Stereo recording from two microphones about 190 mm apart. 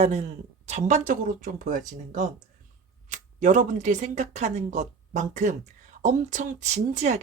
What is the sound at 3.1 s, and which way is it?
Speech, 40° right (ahead or behind).